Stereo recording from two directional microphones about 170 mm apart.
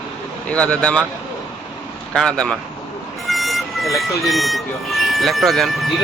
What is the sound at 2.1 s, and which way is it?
Speech, 5° left (ahead or behind).